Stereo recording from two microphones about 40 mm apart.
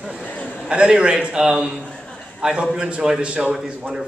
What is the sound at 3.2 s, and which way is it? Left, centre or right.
Speech, right.